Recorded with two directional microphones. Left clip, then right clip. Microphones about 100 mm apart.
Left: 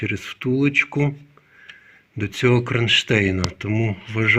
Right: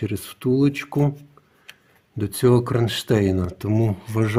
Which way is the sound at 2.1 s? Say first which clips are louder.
Right 1 dB; 50° right (ahead or behind).